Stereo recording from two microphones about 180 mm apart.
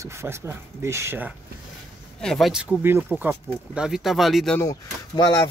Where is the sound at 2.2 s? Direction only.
Centre (ahead or behind).